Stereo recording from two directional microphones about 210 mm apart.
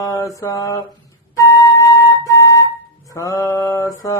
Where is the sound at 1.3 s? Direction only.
15° left (ahead or behind).